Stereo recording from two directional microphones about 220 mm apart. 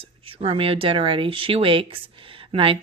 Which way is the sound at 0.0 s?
25° right (ahead or behind).